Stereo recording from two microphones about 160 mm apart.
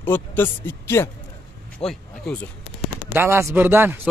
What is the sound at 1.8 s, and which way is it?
Speech, 5° left (ahead or behind).